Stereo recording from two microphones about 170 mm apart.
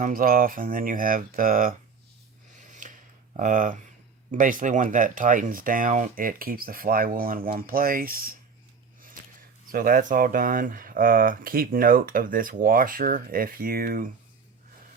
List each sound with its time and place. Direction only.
0.0 s speech: 55° right (ahead or behind)
2.8 s a sound: 50° right (ahead or behind)
3.3 s speech: 50° right (ahead or behind)
9.7 s speech: 55° right (ahead or behind)